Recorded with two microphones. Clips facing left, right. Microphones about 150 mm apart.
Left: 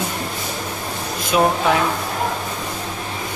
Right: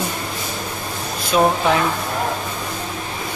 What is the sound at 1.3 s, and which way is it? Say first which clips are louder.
Speech: right 1 dB; 5° left (ahead or behind).